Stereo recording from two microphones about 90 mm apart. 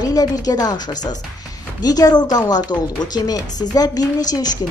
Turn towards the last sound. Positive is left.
turn(degrees=45)  # may be behind; listen again after turning